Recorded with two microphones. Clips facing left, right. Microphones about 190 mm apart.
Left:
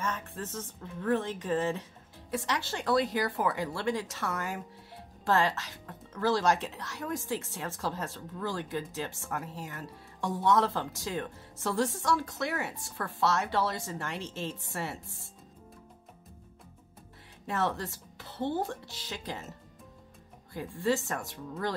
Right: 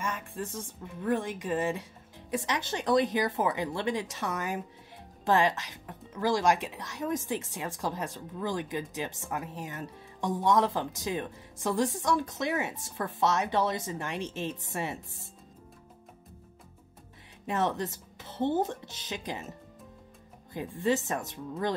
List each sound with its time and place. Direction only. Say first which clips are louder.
0.0 s speech: right 1 dB; 10° right (ahead or behind)
17.5 s speech: right 2 dB; 15° right (ahead or behind)
20.5 s speech: right 1 dB; 20° right (ahead or behind)